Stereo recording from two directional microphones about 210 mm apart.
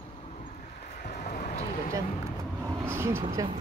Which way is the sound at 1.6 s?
35° left (ahead or behind).